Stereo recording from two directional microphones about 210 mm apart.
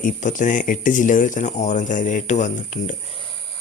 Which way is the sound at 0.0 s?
35° left (ahead or behind).